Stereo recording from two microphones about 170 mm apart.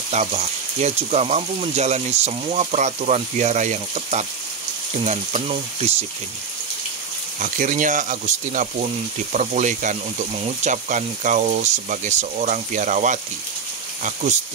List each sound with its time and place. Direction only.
0.1 s speech: 40° right (ahead or behind)
7.3 s speech: 50° right (ahead or behind)